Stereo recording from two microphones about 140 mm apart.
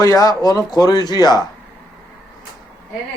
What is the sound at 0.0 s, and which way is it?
Speech, 25° left (ahead or behind).